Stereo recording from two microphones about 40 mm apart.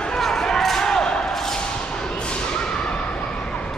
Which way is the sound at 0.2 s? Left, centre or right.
Centre.